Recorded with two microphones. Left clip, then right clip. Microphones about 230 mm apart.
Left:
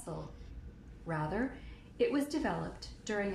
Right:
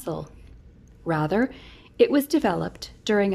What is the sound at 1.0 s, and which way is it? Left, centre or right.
A woman's voice, right.